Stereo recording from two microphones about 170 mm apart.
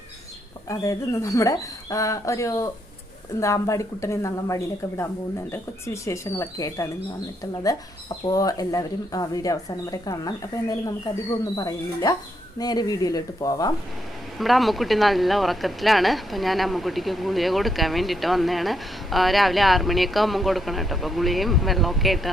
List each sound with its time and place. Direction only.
0.7 s a woman's voice: 20° left (ahead or behind)
14.3 s speech: centre (ahead or behind)